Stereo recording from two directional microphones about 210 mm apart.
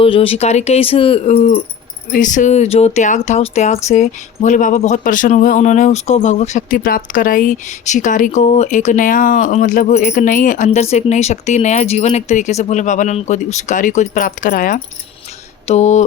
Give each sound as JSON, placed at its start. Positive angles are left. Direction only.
{"t": 0.0, "sound": "speech", "side_deg": 25}